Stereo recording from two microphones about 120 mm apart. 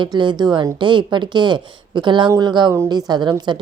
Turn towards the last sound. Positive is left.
turn(degrees=-40)  # may be behind; listen again after turning